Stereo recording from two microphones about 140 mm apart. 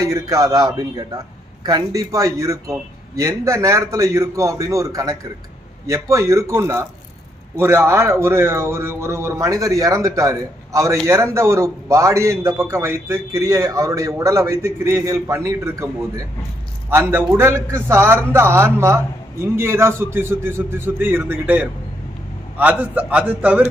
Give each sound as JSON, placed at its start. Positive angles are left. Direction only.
{"t": 0.0, "sound": "a man's voice", "side_deg": -25}